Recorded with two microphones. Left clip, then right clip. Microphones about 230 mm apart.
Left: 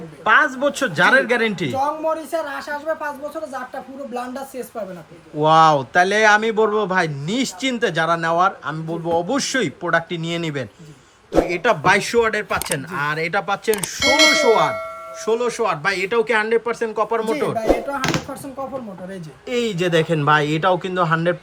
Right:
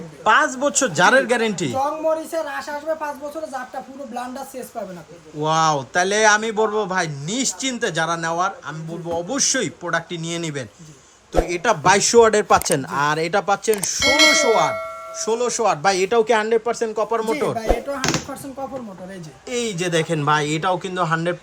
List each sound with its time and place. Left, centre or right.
0.3 s speech: centre
4.1 s speech: centre
19.5 s speech: centre